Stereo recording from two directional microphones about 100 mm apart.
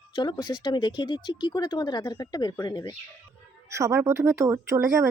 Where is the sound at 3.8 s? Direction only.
30° right (ahead or behind).